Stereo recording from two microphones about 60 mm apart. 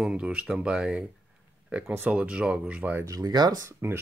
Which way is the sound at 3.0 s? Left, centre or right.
Right.